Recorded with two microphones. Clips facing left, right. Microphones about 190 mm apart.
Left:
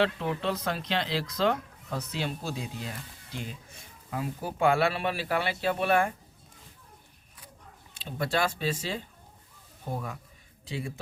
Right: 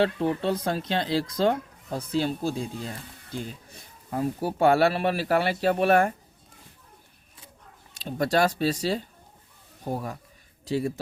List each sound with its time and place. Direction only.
0.0 s speech: 35° right (ahead or behind)
7.9 s speech: 40° right (ahead or behind)